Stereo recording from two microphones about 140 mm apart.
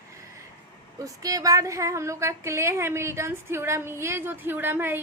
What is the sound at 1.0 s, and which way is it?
A woman's voice, 25° right (ahead or behind).